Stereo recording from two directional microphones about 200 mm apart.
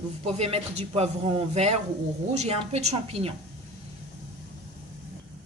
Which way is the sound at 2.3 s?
35° right (ahead or behind).